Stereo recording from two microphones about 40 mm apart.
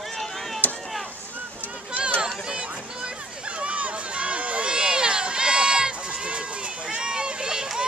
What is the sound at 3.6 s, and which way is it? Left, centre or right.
Run, right.